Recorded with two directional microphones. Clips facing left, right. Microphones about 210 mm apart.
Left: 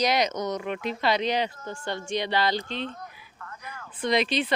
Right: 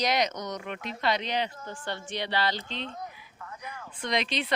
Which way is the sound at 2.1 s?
10° left (ahead or behind).